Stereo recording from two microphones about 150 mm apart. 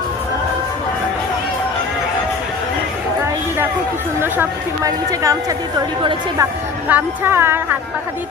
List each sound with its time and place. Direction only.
4.2 s a woman's voice: 20° right (ahead or behind)
6.8 s speech: 15° right (ahead or behind)